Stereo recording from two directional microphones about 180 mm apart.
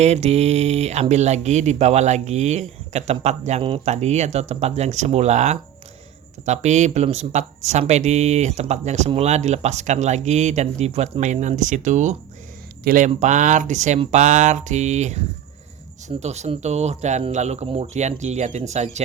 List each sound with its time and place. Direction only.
0.0 s speech: 35° right (ahead or behind)
13.1 s speech: 40° right (ahead or behind)